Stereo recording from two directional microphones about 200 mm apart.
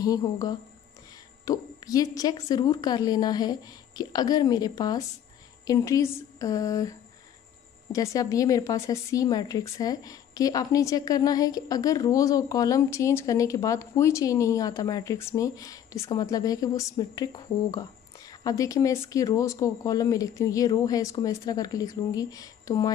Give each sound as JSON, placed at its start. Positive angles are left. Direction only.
{"t": 0.0, "sound": "a woman's voice", "side_deg": 20}